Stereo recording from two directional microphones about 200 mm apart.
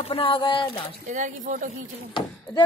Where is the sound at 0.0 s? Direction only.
30° left (ahead or behind).